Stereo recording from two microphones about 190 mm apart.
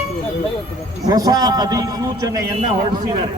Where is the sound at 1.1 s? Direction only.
20° right (ahead or behind).